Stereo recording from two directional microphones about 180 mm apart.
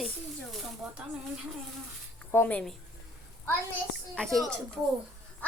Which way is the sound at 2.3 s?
10° left (ahead or behind).